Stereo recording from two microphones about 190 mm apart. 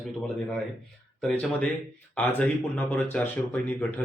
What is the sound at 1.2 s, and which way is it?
Speech, 5° left (ahead or behind).